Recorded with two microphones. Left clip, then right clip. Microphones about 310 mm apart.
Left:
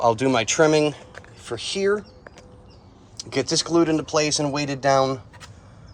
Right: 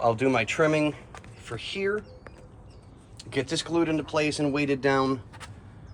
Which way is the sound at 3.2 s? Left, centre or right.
Left.